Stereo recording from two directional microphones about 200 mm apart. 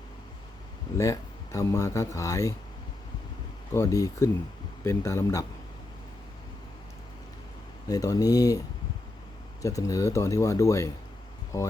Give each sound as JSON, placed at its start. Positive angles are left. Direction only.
{"t": 0.9, "sound": "speech", "side_deg": 15}
{"t": 3.8, "sound": "speech", "side_deg": 15}
{"t": 7.9, "sound": "speech", "side_deg": 20}